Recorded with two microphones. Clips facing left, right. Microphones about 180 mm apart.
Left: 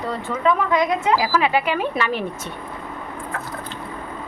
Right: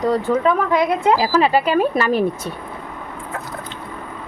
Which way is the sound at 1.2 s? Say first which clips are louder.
Right 4 dB; 35° right (ahead or behind).